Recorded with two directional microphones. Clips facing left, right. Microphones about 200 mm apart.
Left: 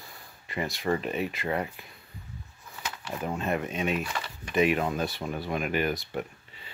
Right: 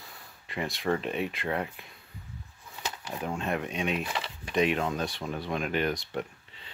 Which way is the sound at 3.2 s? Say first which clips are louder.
Left 2 dB; centre (ahead or behind).